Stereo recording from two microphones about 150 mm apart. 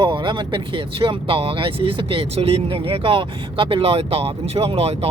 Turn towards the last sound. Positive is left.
turn(degrees=-40)  # may be behind; listen again after turning